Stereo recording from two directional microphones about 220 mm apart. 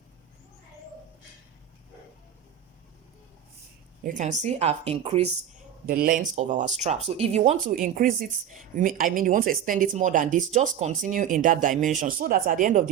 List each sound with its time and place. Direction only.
4.0 s speech: 35° right (ahead or behind)
5.8 s speech: 40° right (ahead or behind)